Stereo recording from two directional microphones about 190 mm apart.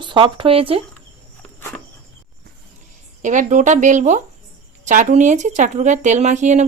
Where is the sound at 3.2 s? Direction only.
40° right (ahead or behind).